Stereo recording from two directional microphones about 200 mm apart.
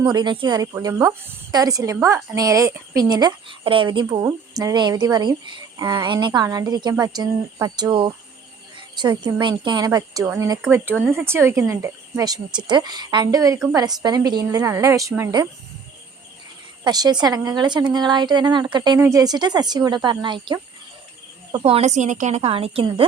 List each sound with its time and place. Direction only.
0.0 s a woman's voice: 20° right (ahead or behind)
16.8 s speech: 20° right (ahead or behind)